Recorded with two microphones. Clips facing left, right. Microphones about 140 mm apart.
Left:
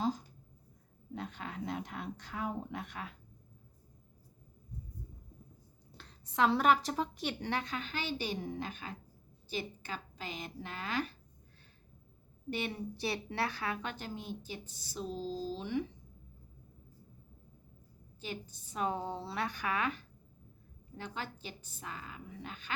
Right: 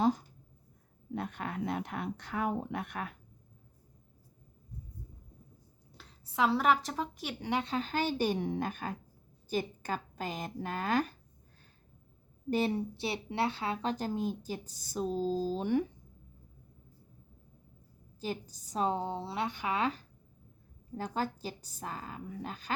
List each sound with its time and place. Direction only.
1.1 s speech: 55° right (ahead or behind)
6.0 s a woman's voice: 5° right (ahead or behind)
7.6 s a woman's voice: 35° right (ahead or behind)
8.4 s a woman's voice: 60° right (ahead or behind); by 11.1 s 45° right (ahead or behind)
12.5 s a woman's voice: 35° right (ahead or behind)
13.9 s a woman's voice: 40° right (ahead or behind)
18.2 s a woman's voice: 40° right (ahead or behind)